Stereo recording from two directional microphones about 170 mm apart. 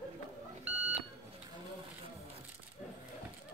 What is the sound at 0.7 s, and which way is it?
Beep, 10° right (ahead or behind).